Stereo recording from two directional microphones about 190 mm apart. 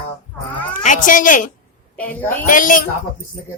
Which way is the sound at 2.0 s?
10° left (ahead or behind).